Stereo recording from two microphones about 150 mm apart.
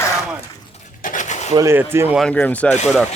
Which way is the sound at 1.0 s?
60° left (ahead or behind).